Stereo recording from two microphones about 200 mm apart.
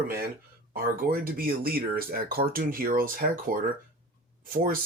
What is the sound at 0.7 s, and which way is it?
Speech, 45° right (ahead or behind).